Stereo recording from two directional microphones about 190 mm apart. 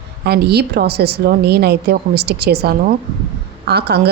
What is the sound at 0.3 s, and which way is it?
A woman's voice, 60° right (ahead or behind).